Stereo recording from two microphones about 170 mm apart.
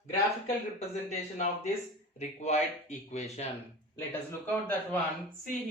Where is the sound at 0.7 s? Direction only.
40° left (ahead or behind).